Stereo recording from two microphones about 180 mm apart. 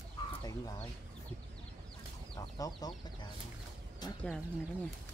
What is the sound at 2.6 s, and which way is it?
Speech, 20° left (ahead or behind).